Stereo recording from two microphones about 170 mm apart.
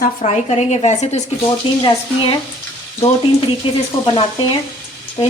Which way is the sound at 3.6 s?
30° left (ahead or behind).